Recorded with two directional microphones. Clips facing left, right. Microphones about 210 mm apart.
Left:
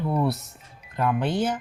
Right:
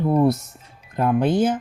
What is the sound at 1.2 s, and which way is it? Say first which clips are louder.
Speech: right 8 dB; 50° right (ahead or behind).